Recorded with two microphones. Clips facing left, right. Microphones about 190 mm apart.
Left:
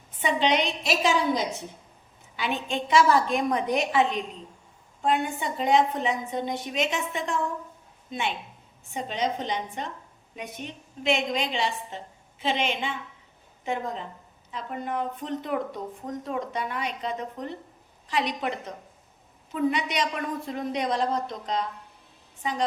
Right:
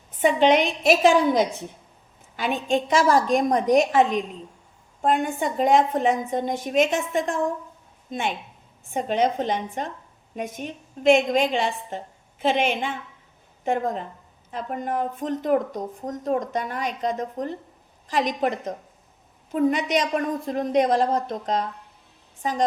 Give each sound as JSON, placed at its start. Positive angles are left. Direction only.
{"t": 0.2, "sound": "a woman's voice", "side_deg": -50}